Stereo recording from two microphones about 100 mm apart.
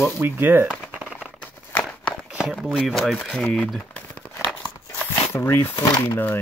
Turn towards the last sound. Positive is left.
turn(degrees=20)  # may be behind; listen again after turning